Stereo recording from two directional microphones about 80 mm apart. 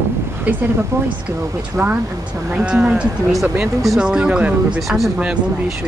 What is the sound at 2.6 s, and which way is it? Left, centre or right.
Speech, centre.